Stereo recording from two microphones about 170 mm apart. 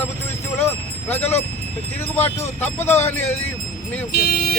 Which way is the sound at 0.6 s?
10° left (ahead or behind).